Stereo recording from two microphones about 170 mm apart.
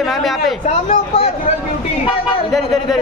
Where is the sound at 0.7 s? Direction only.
35° left (ahead or behind).